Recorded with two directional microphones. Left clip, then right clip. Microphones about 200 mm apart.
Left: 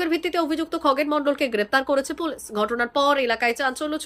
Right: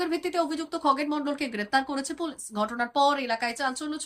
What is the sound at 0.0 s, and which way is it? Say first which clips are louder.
Speech: left 4 dB; 10° left (ahead or behind).